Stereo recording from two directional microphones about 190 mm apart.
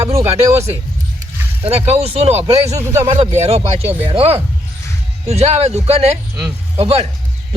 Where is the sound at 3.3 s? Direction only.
35° right (ahead or behind).